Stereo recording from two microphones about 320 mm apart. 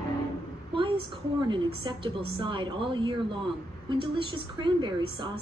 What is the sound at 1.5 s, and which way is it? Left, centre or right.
A woman's voice, centre.